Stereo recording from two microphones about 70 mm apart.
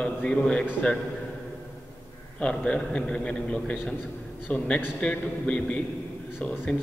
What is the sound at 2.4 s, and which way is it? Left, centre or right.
A man's voice, centre.